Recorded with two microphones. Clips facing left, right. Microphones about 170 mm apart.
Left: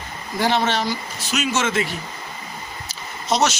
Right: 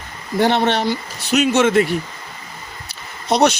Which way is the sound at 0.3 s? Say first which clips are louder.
Right 4 dB; 60° right (ahead or behind).